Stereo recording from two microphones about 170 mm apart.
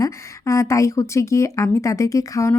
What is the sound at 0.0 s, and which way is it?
Speech, 15° left (ahead or behind).